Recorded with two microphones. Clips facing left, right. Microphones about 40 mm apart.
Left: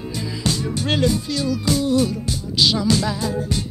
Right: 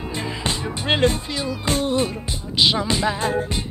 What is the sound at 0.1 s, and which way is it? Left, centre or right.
Music, right.